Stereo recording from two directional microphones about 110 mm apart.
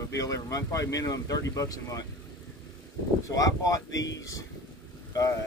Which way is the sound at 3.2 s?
30° left (ahead or behind).